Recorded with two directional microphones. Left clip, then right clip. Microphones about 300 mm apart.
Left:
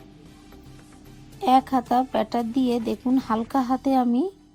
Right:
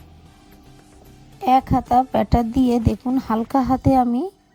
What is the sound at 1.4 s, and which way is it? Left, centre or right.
A woman's voice, right.